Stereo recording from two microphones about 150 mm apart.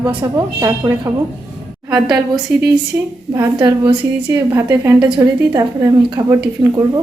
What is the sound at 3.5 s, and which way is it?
Speech, 30° right (ahead or behind).